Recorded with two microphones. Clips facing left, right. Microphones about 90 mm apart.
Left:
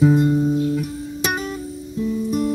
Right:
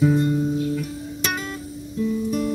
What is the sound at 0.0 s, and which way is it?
Music, 20° left (ahead or behind).